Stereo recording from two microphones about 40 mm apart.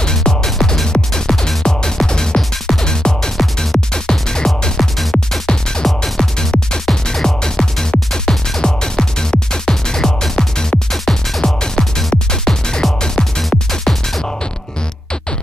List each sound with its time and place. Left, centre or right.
0.0 s music: centre
11.4 s music: centre